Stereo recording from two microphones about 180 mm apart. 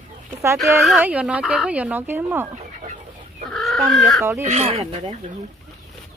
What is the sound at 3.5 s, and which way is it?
Chicken, centre (ahead or behind).